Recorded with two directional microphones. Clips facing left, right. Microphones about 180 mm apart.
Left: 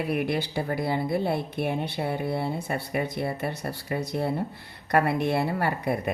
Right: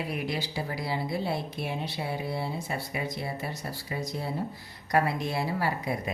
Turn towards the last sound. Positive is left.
turn(degrees=60)  # may be behind; listen again after turning